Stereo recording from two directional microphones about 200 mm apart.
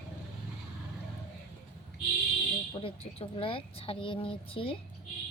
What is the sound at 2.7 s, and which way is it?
Speech, 30° left (ahead or behind).